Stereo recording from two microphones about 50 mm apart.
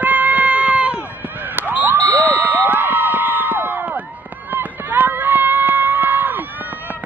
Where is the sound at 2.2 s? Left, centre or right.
Right.